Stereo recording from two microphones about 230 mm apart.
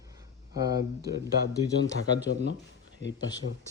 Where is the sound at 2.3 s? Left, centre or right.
Left.